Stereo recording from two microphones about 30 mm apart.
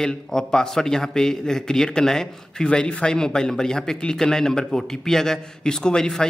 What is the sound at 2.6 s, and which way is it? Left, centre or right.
A man's voice, left.